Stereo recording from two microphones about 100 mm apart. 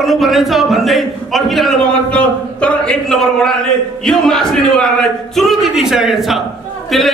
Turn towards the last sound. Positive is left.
turn(degrees=0)  # may be behind; listen again after turning